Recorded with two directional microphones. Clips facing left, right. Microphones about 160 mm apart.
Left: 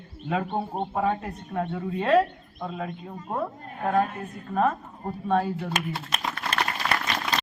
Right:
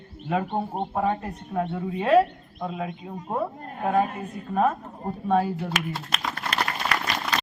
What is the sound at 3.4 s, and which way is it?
A man's voice, 5° right (ahead or behind).